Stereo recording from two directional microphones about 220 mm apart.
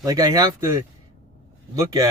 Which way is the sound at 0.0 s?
15° right (ahead or behind).